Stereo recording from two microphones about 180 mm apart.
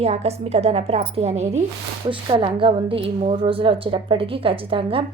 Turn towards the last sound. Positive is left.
turn(degrees=-30)  # may be behind; listen again after turning